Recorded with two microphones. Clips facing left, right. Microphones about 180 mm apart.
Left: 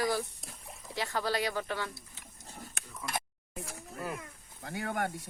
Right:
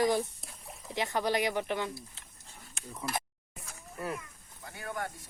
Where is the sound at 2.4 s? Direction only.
40° left (ahead or behind).